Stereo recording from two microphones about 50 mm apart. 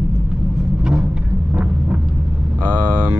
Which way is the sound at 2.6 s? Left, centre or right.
Right.